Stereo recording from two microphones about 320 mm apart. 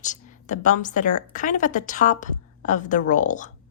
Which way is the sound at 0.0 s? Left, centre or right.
Left.